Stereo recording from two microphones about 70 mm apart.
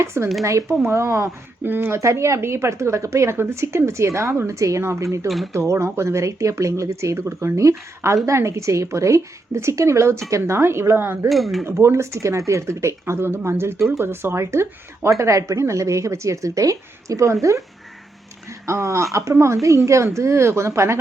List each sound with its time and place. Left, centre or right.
0.0 s speech: right
2.0 s speech: right
11.3 s speech: centre
11.6 s speech: right
18.6 s speech: right